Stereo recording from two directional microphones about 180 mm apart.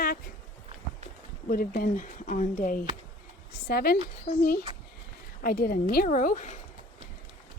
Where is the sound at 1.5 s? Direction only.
55° left (ahead or behind).